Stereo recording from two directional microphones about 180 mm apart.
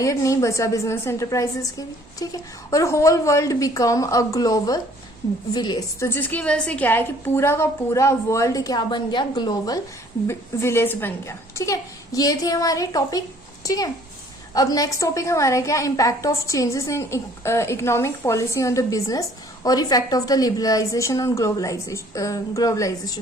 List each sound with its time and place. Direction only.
0.0 s a woman's voice: 20° left (ahead or behind)
6.1 s a woman's voice: 10° left (ahead or behind)